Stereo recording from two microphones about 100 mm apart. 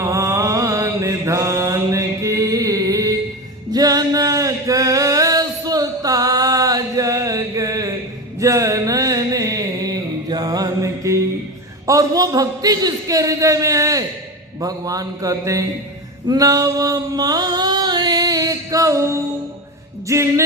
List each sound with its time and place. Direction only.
0.0 s mantra: 30° right (ahead or behind)
3.7 s male singing: 40° right (ahead or behind)
8.4 s a sound: 30° right (ahead or behind)
11.9 s speech: 35° right (ahead or behind)
16.2 s a sound: 40° right (ahead or behind)
20.1 s speech: 30° right (ahead or behind)